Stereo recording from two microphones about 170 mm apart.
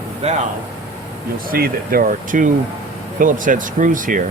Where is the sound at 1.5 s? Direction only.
60° right (ahead or behind).